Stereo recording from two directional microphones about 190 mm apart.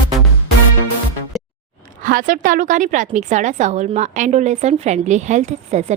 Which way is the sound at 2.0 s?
45° right (ahead or behind).